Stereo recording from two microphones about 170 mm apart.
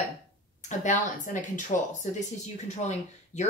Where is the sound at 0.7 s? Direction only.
45° left (ahead or behind).